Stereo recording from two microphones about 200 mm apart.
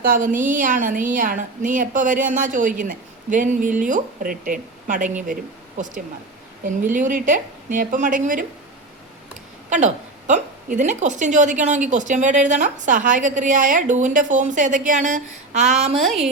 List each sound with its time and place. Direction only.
0.0 s a woman's voice: 40° right (ahead or behind)
9.6 s a woman's voice: 35° right (ahead or behind)
16.0 s speech: centre (ahead or behind)